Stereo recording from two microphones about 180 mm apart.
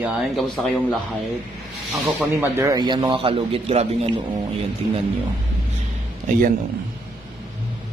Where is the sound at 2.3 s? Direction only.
15° right (ahead or behind); by 4.1 s 35° right (ahead or behind).